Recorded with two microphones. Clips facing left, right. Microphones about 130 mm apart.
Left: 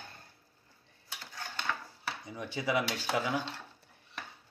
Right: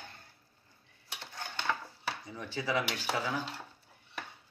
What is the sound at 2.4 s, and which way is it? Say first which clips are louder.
Speech: left 2 dB; 15° left (ahead or behind).